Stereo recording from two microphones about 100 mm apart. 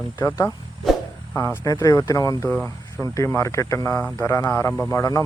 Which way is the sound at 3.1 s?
30° left (ahead or behind).